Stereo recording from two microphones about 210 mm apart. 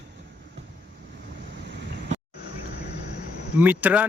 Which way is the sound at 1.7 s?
55° right (ahead or behind).